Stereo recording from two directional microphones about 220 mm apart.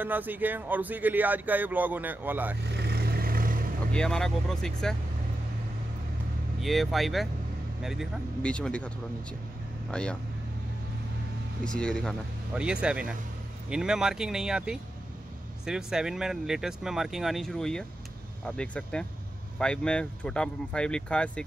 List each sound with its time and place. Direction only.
0.0 s speech: 10° right (ahead or behind)
2.7 s vehicle: 45° right (ahead or behind)
3.9 s speech: 5° left (ahead or behind)
6.6 s speech: centre (ahead or behind)
11.6 s speech: 5° left (ahead or behind)